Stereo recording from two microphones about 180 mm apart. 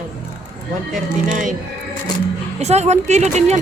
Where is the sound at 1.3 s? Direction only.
45° right (ahead or behind).